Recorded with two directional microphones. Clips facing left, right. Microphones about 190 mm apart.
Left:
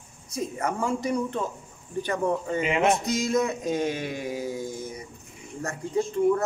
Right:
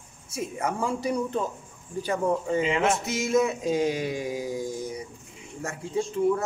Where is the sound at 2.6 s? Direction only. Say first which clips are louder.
Left 4 dB; 20° left (ahead or behind).